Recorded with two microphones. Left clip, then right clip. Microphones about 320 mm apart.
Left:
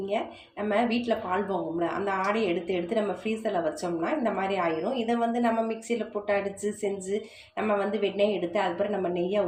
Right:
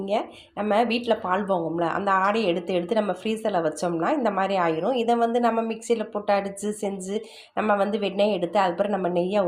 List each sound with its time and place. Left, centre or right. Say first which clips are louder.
0.7 s a woman's voice: right 4 dB; right